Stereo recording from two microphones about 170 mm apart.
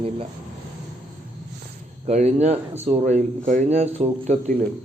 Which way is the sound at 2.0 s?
40° right (ahead or behind).